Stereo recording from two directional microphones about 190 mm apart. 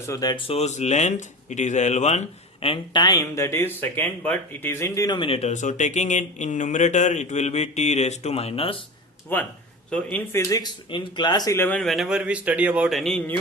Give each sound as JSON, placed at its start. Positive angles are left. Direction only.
{"t": 0.0, "sound": "speech", "side_deg": 15}
{"t": 9.3, "sound": "a man's voice", "side_deg": 10}